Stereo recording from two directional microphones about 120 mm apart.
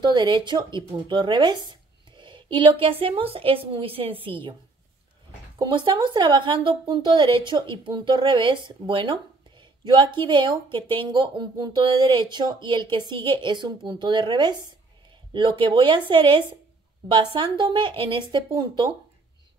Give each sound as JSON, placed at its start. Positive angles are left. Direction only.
{"t": 0.0, "sound": "speech", "side_deg": -40}
{"t": 5.6, "sound": "speech", "side_deg": -40}